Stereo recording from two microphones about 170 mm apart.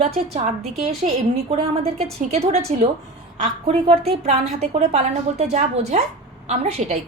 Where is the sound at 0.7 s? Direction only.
40° right (ahead or behind).